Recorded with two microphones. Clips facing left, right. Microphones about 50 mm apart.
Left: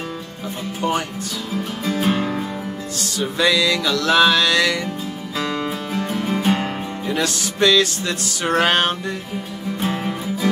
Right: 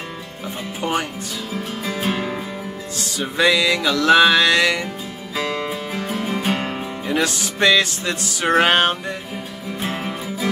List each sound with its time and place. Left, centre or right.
1.9 s music: centre
3.2 s music: centre
5.4 s music: centre
7.2 s music: centre
9.8 s music: centre